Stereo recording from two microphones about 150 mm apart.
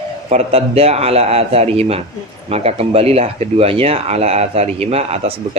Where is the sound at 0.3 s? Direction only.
45° right (ahead or behind).